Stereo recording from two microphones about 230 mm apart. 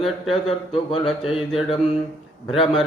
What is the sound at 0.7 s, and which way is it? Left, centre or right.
Mantra, left.